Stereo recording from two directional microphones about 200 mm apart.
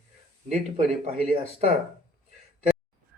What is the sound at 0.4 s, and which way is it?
Speech, 35° right (ahead or behind).